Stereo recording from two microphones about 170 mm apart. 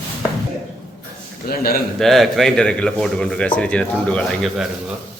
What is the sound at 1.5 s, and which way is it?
Speech, 60° left (ahead or behind).